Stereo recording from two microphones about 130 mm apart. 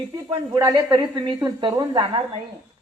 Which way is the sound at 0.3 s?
30° right (ahead or behind).